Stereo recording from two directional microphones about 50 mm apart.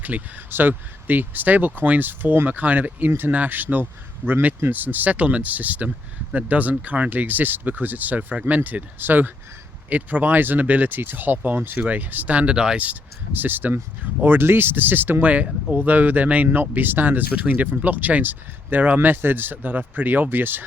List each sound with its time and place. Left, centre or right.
0.0 s speech: right
12.8 s speech: right
14.3 s speech: right